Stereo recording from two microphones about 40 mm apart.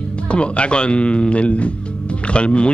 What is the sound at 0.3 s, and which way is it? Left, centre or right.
A man's voice, left.